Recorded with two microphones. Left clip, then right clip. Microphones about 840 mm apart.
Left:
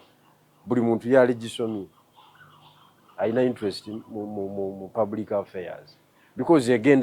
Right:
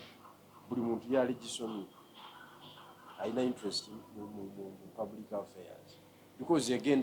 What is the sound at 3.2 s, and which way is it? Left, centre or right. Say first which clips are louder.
Speech: left 12 dB; left.